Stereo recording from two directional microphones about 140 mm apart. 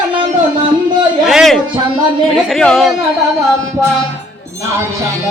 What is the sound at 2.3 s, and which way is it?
Speech, centre (ahead or behind).